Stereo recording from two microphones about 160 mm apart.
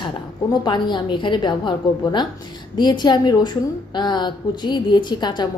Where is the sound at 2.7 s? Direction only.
30° left (ahead or behind).